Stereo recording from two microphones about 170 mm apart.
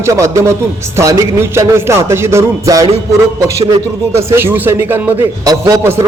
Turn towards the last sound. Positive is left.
turn(degrees=-15)  # may be behind; listen again after turning